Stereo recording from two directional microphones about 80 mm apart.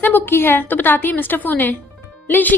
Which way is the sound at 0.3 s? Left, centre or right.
Left.